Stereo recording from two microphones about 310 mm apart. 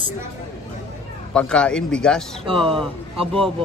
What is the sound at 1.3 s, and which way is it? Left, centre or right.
Speech, centre.